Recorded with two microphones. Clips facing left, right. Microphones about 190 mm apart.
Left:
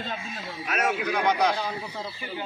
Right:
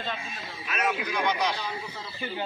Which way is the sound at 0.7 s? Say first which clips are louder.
Left 3 dB; 65° left (ahead or behind).